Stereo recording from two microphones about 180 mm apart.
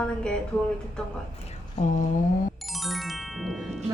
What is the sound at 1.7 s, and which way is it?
Mantra, 45° left (ahead or behind).